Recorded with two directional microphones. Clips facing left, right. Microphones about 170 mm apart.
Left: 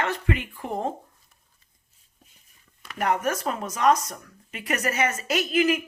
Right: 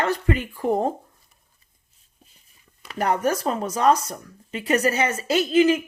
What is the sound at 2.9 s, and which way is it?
Speech, 35° right (ahead or behind).